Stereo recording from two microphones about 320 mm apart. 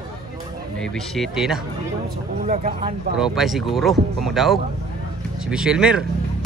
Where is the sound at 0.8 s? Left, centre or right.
Centre.